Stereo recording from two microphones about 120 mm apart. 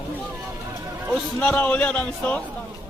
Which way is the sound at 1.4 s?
15° left (ahead or behind).